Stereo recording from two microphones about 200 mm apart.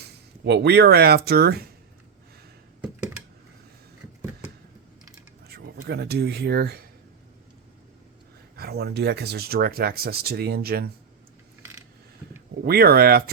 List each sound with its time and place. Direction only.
0.0 s speech: 55° right (ahead or behind)
2.8 s computer keyboard: 5° right (ahead or behind)
5.5 s speech: 55° right (ahead or behind)
8.5 s speech: 50° right (ahead or behind)
12.6 s speech: 50° right (ahead or behind)